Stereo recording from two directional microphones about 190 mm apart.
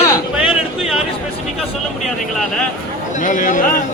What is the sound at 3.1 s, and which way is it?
Speech, 45° left (ahead or behind).